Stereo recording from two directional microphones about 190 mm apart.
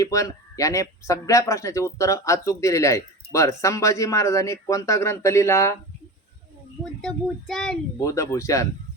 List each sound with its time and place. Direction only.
0.0 s speech: 15° left (ahead or behind)
7.0 s child singing: 5° left (ahead or behind)
7.9 s speech: 15° left (ahead or behind)